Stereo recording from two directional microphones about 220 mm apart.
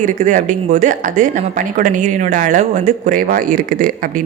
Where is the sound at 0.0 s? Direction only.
35° right (ahead or behind).